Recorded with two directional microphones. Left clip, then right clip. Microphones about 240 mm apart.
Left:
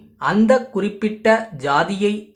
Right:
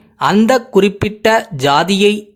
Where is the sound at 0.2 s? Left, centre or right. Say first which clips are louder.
Right 4 dB; right.